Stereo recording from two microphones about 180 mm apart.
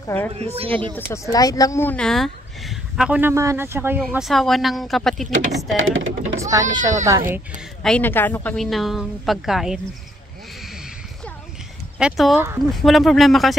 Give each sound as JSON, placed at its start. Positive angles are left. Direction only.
{"t": 0.0, "sound": "a child's voice", "side_deg": 10}
{"t": 0.6, "sound": "speech", "side_deg": -30}
{"t": 0.9, "sound": "speech", "side_deg": 15}
{"t": 4.1, "sound": "speech", "side_deg": 0}
{"t": 5.8, "sound": "speech", "side_deg": -90}
{"t": 6.4, "sound": "a child's voice", "side_deg": -20}
{"t": 7.8, "sound": "speech", "side_deg": 5}
{"t": 12.0, "sound": "speech", "side_deg": 0}